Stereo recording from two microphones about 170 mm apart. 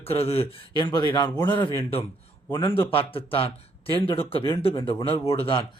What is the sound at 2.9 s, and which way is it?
A man's voice, 35° left (ahead or behind).